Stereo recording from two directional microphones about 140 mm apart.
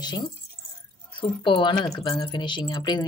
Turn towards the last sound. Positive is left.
turn(degrees=30)  # may be behind; listen again after turning